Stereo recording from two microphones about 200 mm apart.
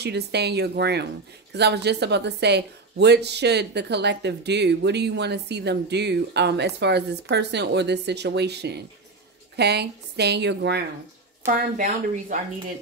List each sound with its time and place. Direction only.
0.0 s a woman's voice: 55° right (ahead or behind)
11.4 s speech: 40° right (ahead or behind)